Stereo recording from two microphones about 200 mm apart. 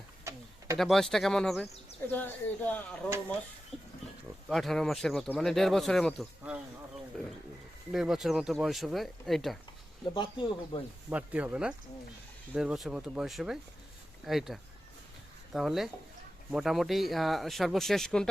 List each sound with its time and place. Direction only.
0.3 s a sound: 15° right (ahead or behind)
0.8 s speech: centre (ahead or behind)
3.7 s pig: centre (ahead or behind)
4.4 s speech: centre (ahead or behind)
7.9 s speech: centre (ahead or behind)
10.2 s speech: 25° left (ahead or behind)
11.1 s speech: 10° right (ahead or behind)